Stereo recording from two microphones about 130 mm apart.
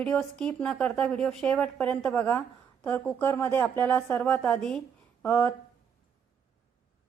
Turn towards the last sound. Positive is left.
turn(degrees=10)  # may be behind; listen again after turning